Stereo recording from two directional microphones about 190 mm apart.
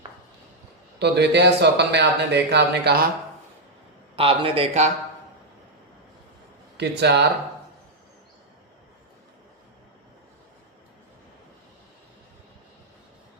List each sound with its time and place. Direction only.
0.9 s speech: 60° right (ahead or behind)
4.1 s speech: 30° right (ahead or behind)
6.7 s speech: 60° right (ahead or behind)